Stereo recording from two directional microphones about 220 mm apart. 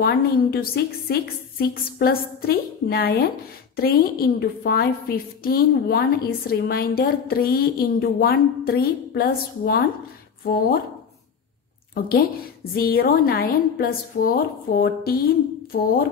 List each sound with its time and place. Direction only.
0.0 s a woman's voice: 45° left (ahead or behind)
11.9 s a woman's voice: 45° left (ahead or behind)